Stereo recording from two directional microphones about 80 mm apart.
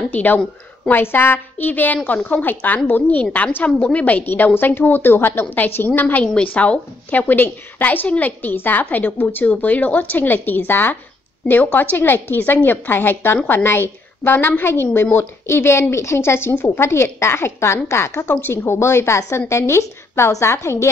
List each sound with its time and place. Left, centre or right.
0.1 s a woman's voice: left
3.3 s a woman's voice: centre; by 20.9 s left